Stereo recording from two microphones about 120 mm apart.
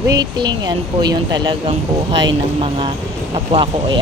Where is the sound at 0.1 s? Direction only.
35° right (ahead or behind).